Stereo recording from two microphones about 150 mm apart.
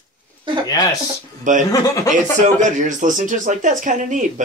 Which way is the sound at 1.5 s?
55° right (ahead or behind).